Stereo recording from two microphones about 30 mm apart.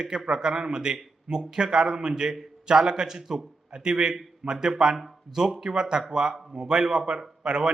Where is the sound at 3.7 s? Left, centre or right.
Right.